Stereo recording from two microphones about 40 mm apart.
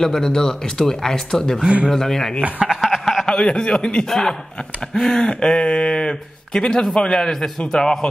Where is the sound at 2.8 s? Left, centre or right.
Centre.